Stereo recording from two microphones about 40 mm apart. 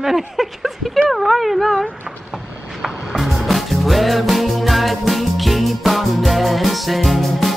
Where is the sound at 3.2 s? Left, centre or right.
Centre.